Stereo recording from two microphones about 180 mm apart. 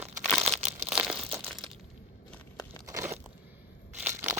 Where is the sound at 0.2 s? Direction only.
5° left (ahead or behind).